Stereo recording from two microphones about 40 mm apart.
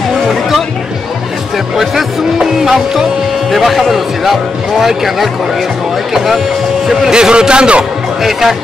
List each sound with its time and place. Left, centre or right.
0.3 s music: centre
2.3 s music: centre
3.4 s speech: centre
7.0 s speech: centre
8.2 s speech: centre